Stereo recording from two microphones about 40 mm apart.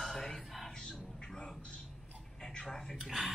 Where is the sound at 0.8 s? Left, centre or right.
Centre.